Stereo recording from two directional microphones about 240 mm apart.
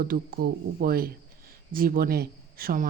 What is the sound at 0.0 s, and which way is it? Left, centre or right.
Speech, right.